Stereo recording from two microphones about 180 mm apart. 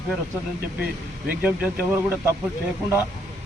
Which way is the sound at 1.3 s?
10° right (ahead or behind).